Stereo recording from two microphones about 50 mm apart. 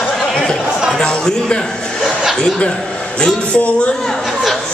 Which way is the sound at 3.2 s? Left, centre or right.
Left.